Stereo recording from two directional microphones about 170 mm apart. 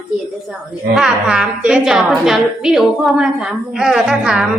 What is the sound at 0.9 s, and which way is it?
A woman's voice, 5° right (ahead or behind).